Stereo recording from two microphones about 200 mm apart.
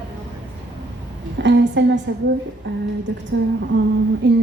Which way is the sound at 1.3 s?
60° right (ahead or behind).